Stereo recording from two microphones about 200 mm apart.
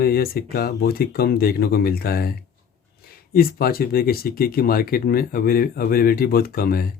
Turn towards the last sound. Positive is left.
turn(degrees=45)  # may be behind; listen again after turning